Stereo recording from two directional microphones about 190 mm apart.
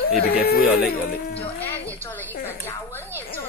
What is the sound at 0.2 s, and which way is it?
Speech, 55° left (ahead or behind).